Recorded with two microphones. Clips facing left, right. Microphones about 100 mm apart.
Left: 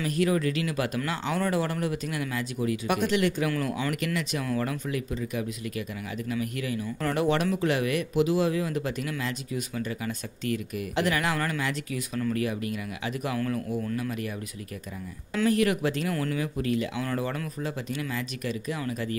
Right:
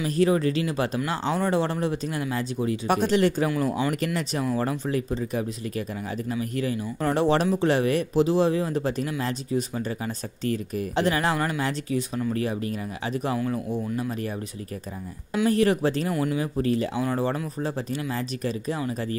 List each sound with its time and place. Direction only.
0.0 s speech: 30° right (ahead or behind)
3.4 s speech: 20° right (ahead or behind)
3.9 s speech: 35° right (ahead or behind)
15.5 s speech: 35° right (ahead or behind)
16.1 s speech: 20° right (ahead or behind)
16.5 s speech: 35° right (ahead or behind)